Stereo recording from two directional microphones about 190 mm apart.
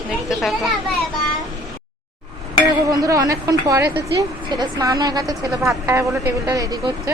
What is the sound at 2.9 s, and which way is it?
Speech, 20° right (ahead or behind).